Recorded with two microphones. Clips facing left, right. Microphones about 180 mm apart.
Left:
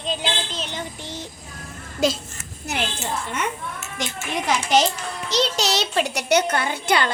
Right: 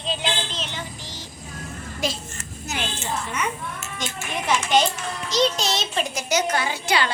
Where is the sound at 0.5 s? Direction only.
10° left (ahead or behind).